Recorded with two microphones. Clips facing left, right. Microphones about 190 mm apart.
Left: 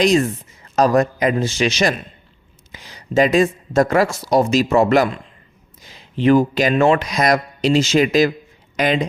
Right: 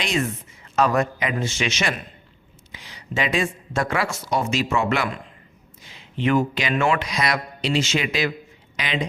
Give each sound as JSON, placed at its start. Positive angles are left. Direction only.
{"t": 0.0, "sound": "speech", "side_deg": 40}